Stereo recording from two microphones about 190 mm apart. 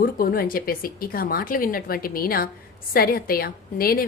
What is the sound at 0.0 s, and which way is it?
A woman's voice, 50° left (ahead or behind).